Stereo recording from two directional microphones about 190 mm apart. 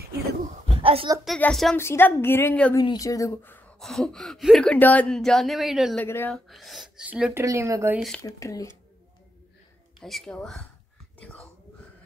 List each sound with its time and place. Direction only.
0.7 s a sound: 30° right (ahead or behind)
1.2 s a woman's voice: centre (ahead or behind)
2.8 s speech: 20° left (ahead or behind); by 5.9 s centre (ahead or behind)
5.9 s a woman's voice: 10° left (ahead or behind)
6.3 s speech: centre (ahead or behind)
8.2 s a woman's voice: 15° left (ahead or behind)
9.9 s speech: centre (ahead or behind)
11.1 s whispering: 5° left (ahead or behind)